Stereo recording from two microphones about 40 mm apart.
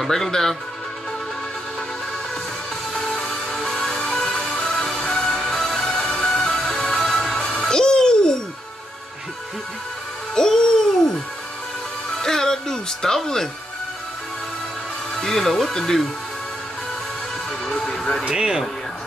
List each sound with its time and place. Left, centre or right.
0.0 s speech: centre
2.9 s music: centre
4.3 s music: left
10.3 s music: centre
12.2 s speech: centre
15.1 s speech: centre
17.6 s speech: centre
18.3 s speech: centre